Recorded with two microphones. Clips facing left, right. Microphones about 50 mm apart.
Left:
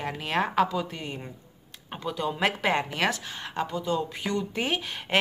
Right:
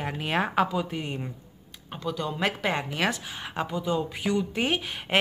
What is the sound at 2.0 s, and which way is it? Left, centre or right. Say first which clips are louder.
A woman's voice: left 1 dB; centre.